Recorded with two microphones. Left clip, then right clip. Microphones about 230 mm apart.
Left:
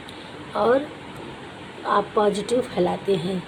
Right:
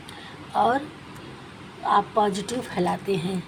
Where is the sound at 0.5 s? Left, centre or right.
Right.